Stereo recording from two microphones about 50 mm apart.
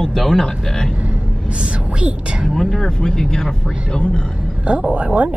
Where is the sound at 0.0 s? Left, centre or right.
Centre.